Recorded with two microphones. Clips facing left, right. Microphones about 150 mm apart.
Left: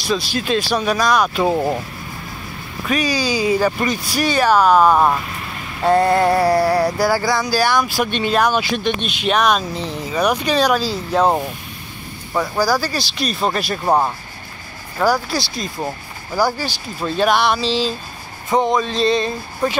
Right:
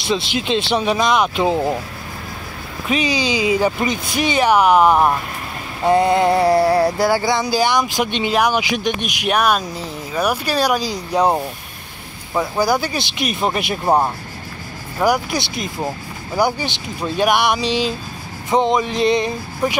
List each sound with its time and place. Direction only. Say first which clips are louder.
0.0 s speech: even; 25° right (ahead or behind)
2.9 s speech: even; 20° right (ahead or behind)
5.9 s a sound: even; 15° right (ahead or behind)
12.4 s speech: even; 20° right (ahead or behind)
13.8 s speech: right 1 dB; 5° right (ahead or behind)
15.0 s speech: even; 15° right (ahead or behind)
17.2 s a sound: even; 15° right (ahead or behind)